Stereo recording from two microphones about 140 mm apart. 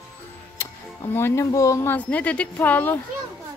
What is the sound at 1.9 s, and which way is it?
Speech, 10° left (ahead or behind).